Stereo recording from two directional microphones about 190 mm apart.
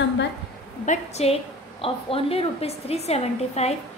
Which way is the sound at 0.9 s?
35° left (ahead or behind).